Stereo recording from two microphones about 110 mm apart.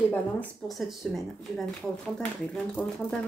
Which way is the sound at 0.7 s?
Centre (ahead or behind).